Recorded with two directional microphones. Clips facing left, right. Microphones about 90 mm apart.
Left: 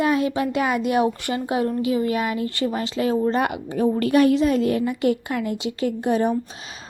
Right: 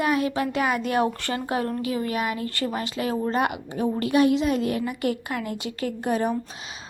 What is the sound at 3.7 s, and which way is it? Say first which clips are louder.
A woman's voice: left 7 dB; 40° left (ahead or behind).